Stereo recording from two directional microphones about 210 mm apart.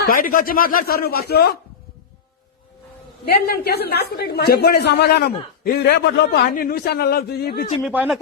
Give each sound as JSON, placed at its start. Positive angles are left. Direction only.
{"t": 0.1, "sound": "speech", "side_deg": 40}
{"t": 3.2, "sound": "speech", "side_deg": 45}
{"t": 7.8, "sound": "speech", "side_deg": 0}